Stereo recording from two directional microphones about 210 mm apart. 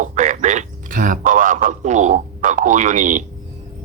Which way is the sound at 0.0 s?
35° right (ahead or behind).